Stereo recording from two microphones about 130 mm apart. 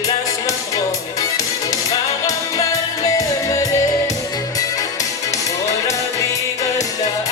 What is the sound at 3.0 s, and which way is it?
Music, 25° left (ahead or behind).